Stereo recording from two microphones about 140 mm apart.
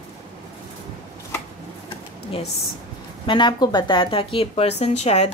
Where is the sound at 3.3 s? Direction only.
35° left (ahead or behind).